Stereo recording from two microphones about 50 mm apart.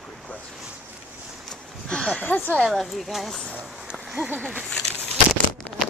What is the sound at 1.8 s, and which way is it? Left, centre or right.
Speech, centre.